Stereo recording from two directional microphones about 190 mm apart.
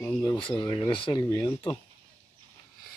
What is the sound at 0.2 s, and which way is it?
Speech, 25° left (ahead or behind).